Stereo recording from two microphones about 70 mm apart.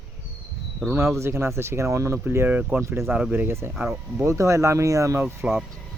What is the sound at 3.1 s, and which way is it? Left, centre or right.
Speech, right.